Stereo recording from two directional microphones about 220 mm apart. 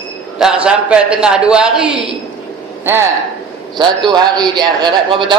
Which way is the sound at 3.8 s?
20° right (ahead or behind).